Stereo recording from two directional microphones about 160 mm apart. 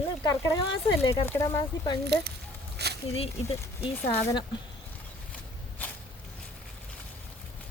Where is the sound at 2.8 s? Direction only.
90° right.